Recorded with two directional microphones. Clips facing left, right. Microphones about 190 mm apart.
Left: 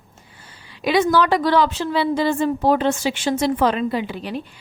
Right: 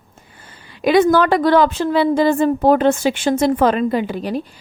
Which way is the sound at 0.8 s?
50° right (ahead or behind).